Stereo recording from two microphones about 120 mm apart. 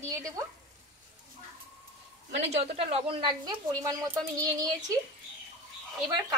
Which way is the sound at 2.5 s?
55° right (ahead or behind).